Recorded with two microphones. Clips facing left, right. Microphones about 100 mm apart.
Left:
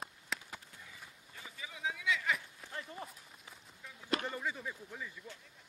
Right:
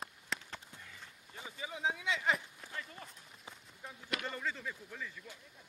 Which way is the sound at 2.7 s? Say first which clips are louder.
Left 3 dB; 30° left (ahead or behind).